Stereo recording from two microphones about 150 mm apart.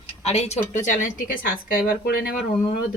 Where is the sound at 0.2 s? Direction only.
45° left (ahead or behind); by 1.8 s 70° left (ahead or behind).